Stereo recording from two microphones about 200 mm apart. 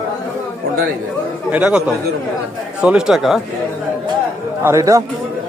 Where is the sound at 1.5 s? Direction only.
5° right (ahead or behind).